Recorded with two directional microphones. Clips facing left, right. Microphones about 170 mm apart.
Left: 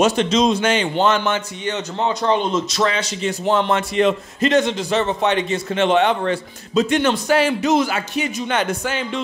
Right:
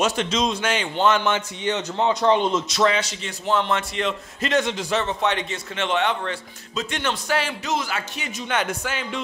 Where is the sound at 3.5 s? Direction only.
30° left (ahead or behind).